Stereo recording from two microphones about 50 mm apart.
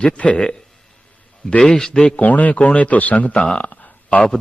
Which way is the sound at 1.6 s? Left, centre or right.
Centre.